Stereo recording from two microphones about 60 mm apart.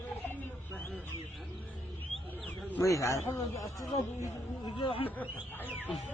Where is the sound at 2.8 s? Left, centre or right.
Left.